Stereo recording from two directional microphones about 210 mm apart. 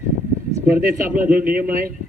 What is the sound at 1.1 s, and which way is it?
Speech, 5° right (ahead or behind).